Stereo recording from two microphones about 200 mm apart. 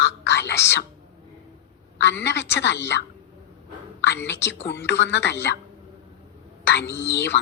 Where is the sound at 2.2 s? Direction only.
60° left (ahead or behind).